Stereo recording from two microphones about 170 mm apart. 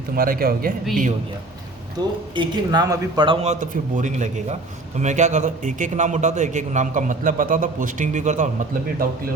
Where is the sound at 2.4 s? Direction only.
25° right (ahead or behind); by 8.5 s 45° right (ahead or behind).